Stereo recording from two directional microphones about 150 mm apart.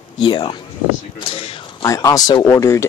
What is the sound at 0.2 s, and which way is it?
A man's voice, 35° left (ahead or behind).